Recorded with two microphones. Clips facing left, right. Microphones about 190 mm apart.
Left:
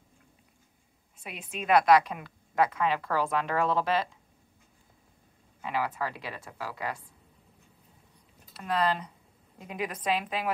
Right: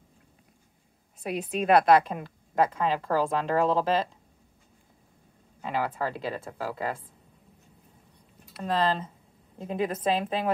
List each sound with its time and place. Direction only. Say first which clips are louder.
1.2 s a woman's voice: right 8 dB; 40° right (ahead or behind)
5.6 s a woman's voice: right 2 dB; 30° right (ahead or behind)
8.6 s a woman's voice: right 2 dB; 25° right (ahead or behind)